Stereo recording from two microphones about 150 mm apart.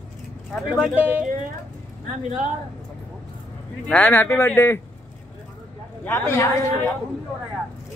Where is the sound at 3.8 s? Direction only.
10° left (ahead or behind).